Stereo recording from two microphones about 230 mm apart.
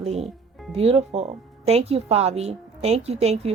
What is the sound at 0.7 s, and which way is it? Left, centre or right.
Speech, right.